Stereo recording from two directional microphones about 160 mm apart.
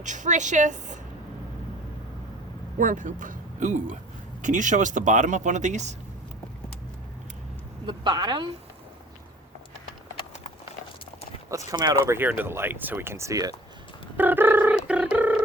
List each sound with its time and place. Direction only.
0.0 s speech: 50° right (ahead or behind)
2.7 s speech: 55° right (ahead or behind)
7.9 s a woman's voice: 25° right (ahead or behind)
11.7 s speech: 20° right (ahead or behind)
14.2 s a sound: 10° right (ahead or behind)